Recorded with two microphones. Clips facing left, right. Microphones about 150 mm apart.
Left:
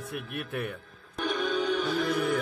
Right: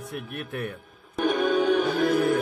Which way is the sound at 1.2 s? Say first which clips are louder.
Right 6 dB; 50° right (ahead or behind).